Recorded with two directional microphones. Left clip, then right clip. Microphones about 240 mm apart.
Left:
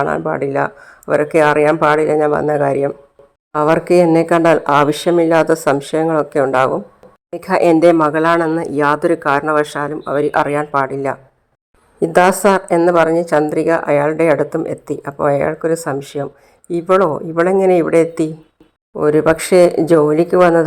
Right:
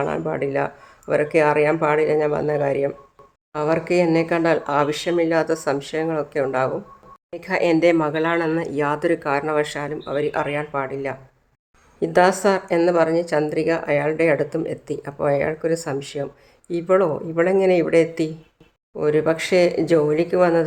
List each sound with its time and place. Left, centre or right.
0.0 s a woman's voice: centre